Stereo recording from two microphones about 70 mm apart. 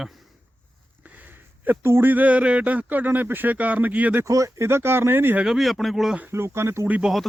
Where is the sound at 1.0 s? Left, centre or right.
Right.